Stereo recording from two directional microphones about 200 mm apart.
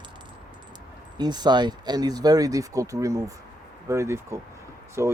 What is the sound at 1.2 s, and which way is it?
Speech, 20° right (ahead or behind).